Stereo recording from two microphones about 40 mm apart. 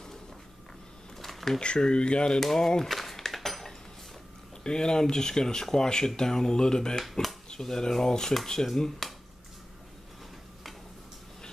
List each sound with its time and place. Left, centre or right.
1.2 s a sound: centre
1.6 s speech: left
2.4 s speech: centre
2.9 s dishes: centre
4.6 s speech: centre